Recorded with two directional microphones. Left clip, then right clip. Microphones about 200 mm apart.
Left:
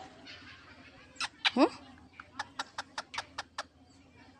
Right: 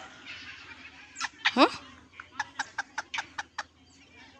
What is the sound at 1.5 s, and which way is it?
Speech, 5° left (ahead or behind).